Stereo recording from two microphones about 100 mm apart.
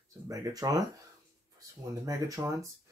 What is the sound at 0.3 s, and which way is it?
Speech, 35° right (ahead or behind).